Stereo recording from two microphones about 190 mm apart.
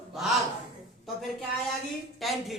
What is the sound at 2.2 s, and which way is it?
Speech, centre (ahead or behind).